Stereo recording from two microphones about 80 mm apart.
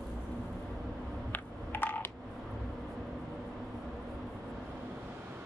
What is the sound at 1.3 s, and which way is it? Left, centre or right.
Telephone, left.